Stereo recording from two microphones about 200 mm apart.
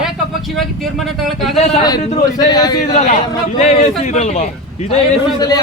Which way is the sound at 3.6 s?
35° left (ahead or behind).